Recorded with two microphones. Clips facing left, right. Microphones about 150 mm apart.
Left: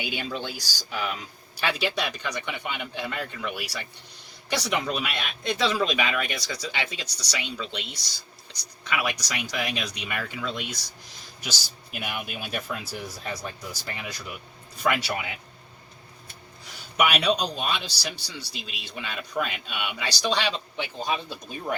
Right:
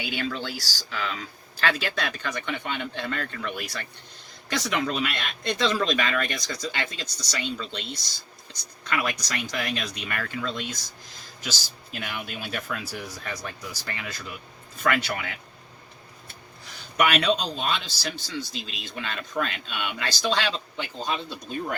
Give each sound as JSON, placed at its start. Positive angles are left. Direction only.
{"t": 0.0, "sound": "speech", "side_deg": 15}
{"t": 14.0, "sound": "speech", "side_deg": 10}
{"t": 17.0, "sound": "speech", "side_deg": 10}